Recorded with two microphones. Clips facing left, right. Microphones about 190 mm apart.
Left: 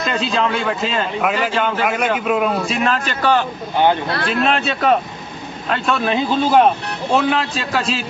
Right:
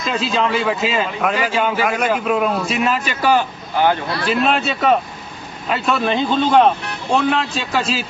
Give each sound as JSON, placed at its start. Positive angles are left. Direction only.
{"t": 0.0, "sound": "a man's voice", "side_deg": 0}